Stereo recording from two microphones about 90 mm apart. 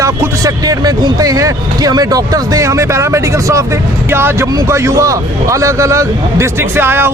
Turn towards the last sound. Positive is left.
turn(degrees=-25)  # may be behind; listen again after turning